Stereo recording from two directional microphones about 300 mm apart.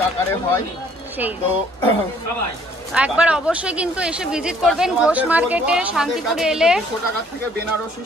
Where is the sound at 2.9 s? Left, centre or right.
Centre.